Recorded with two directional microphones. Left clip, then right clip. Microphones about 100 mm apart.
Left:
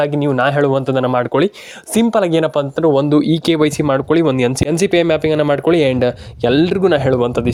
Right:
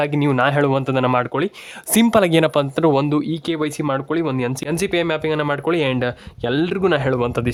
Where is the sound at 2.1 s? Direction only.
5° right (ahead or behind).